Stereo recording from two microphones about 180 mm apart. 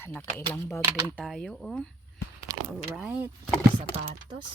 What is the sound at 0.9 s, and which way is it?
Speech, 10° right (ahead or behind).